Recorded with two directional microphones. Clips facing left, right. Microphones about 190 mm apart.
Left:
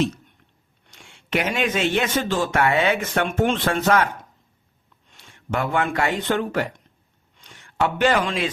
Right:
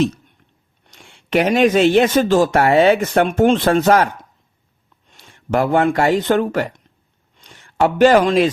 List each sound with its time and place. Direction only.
0.9 s speech: 35° right (ahead or behind)
5.1 s speech: 40° right (ahead or behind)
7.8 s speech: 40° right (ahead or behind)